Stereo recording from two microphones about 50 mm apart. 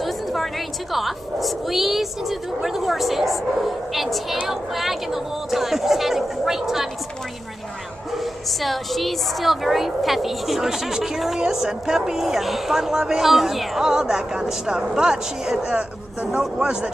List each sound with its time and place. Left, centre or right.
0.0 s speech: centre
8.1 s a man's voice: centre